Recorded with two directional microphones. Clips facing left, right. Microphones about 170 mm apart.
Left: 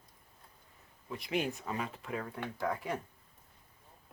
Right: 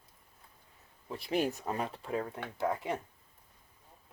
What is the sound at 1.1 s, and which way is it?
Speech, 30° right (ahead or behind).